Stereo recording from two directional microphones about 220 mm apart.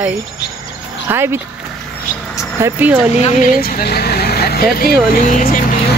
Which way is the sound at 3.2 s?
30° left (ahead or behind).